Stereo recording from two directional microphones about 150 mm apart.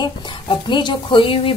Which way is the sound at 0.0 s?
30° left (ahead or behind).